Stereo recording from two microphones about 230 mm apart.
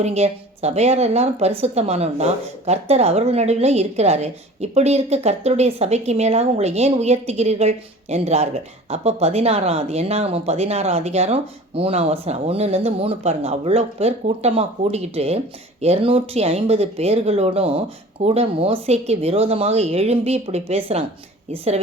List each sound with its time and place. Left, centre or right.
0.0 s a woman's voice: right